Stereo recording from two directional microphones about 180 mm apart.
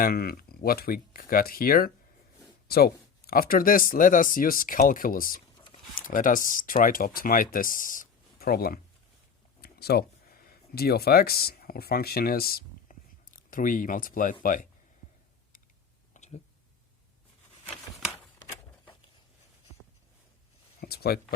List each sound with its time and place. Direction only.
0.0 s speech: 55° left (ahead or behind)
16.1 s a sound: 40° left (ahead or behind)
20.8 s speech: 60° left (ahead or behind)